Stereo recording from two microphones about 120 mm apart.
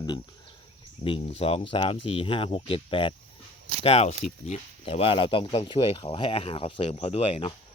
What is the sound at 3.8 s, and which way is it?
Speech, 55° left (ahead or behind).